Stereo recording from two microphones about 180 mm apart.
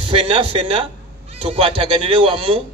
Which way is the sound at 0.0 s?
30° right (ahead or behind).